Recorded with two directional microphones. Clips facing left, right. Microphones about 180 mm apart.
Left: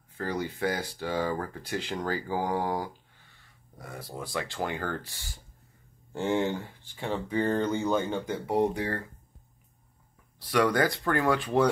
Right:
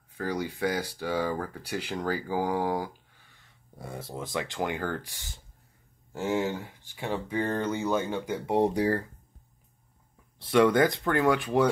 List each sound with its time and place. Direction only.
0.2 s speech: 10° right (ahead or behind)
3.7 s speech: 25° right (ahead or behind)
6.1 s speech: 5° right (ahead or behind)
8.5 s speech: 30° right (ahead or behind)
10.4 s speech: 25° right (ahead or behind)